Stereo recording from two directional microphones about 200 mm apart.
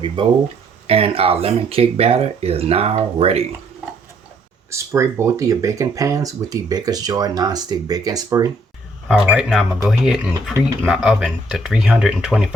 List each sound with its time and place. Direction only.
0.2 s speech: 25° right (ahead or behind)
4.7 s speech: 15° right (ahead or behind)
9.0 s speech: centre (ahead or behind)